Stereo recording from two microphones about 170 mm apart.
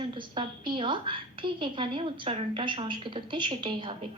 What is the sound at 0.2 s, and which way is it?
A woman's voice, 30° right (ahead or behind).